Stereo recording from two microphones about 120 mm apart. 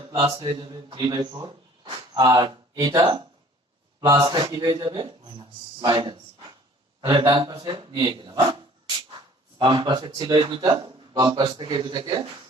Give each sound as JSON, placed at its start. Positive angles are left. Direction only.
{"t": 0.2, "sound": "speech", "side_deg": -45}